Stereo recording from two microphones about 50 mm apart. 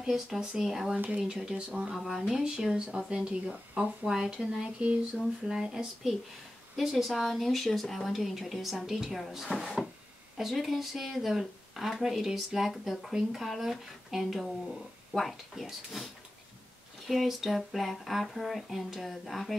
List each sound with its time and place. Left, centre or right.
0.0 s speech: centre
0.9 s speech: right
2.0 s speech: centre
17.1 s speech: centre